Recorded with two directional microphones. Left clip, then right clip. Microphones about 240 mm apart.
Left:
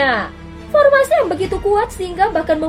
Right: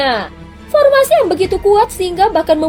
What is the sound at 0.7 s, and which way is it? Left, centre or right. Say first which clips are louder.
A woman's voice: right 2 dB; right.